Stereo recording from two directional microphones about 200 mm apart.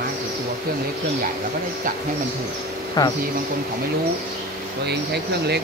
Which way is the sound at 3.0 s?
20° left (ahead or behind).